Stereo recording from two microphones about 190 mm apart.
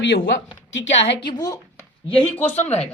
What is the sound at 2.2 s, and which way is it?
Speech, 10° left (ahead or behind).